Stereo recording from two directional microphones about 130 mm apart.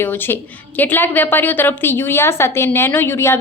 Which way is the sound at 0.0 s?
15° left (ahead or behind).